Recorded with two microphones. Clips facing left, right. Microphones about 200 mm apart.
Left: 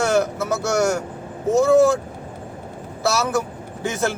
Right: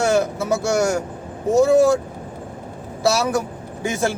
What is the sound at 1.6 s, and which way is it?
Speech, 15° right (ahead or behind).